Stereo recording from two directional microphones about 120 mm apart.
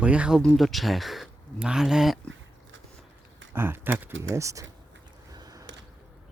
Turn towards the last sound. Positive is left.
turn(degrees=-25)  # may be behind; listen again after turning